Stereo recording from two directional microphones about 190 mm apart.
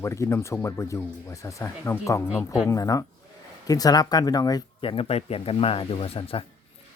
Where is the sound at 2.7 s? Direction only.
15° left (ahead or behind).